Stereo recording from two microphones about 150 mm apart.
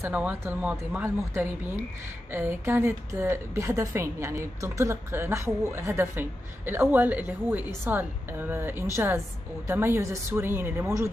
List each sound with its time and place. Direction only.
0.0 s a woman's voice: 10° right (ahead or behind)